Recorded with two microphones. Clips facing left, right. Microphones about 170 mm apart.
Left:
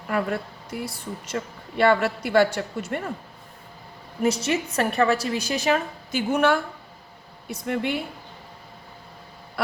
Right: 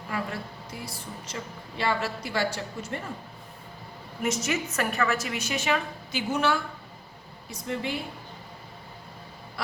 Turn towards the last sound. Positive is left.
turn(degrees=60)  # may be behind; listen again after turning